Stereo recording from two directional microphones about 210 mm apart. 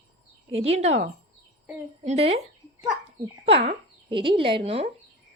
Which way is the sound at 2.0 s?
30° right (ahead or behind).